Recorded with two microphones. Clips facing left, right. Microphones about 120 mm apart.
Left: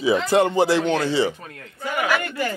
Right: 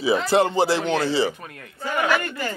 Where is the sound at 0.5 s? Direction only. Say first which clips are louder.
Left 2 dB; 35° right (ahead or behind).